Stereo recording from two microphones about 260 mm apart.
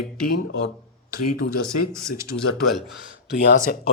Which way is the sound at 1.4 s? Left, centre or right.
Left.